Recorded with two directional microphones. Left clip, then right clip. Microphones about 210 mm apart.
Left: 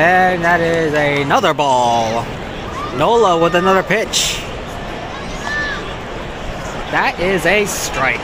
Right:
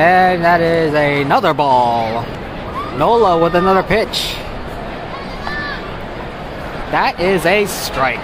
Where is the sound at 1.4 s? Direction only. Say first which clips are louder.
Right 1 dB; centre (ahead or behind).